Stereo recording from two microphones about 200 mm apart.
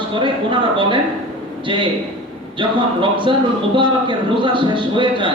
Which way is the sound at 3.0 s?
25° right (ahead or behind).